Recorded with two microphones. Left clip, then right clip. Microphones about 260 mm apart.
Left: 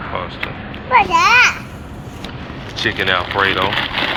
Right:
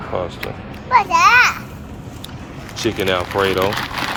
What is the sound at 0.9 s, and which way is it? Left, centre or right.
Speech, centre.